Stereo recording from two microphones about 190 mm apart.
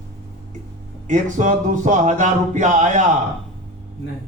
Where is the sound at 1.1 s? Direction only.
40° right (ahead or behind).